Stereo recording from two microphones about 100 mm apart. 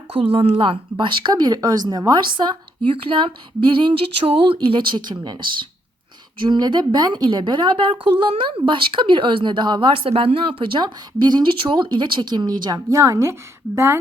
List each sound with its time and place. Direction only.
0.1 s a woman's voice: 65° right (ahead or behind); by 13.0 s 45° right (ahead or behind)
13.0 s a woman's voice: 30° right (ahead or behind)